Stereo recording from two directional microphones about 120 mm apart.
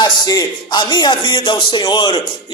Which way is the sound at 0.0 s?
35° left (ahead or behind).